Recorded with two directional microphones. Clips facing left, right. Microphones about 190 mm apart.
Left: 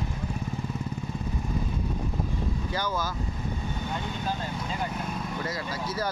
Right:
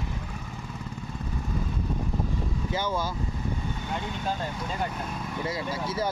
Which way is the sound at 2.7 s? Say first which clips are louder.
Right 3 dB; 25° right (ahead or behind).